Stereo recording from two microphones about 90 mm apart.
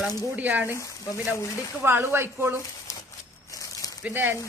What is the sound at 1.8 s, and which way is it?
Speech, 25° right (ahead or behind).